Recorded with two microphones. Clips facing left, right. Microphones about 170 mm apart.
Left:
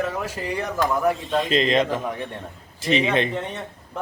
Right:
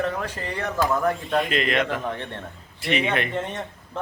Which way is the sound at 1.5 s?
25° left (ahead or behind).